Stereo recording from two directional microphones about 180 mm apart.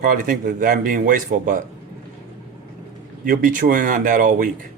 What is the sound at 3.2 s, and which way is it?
Speech, 50° right (ahead or behind).